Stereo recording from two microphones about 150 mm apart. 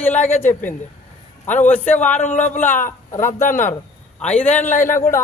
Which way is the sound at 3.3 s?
60° left (ahead or behind).